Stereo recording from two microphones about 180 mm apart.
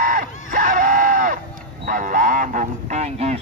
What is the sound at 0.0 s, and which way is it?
Screaming, 50° right (ahead or behind).